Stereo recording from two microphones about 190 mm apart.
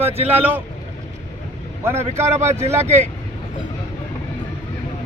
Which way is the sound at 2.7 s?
15° right (ahead or behind).